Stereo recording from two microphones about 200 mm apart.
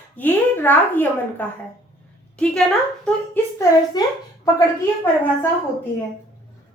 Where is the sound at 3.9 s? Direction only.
20° left (ahead or behind).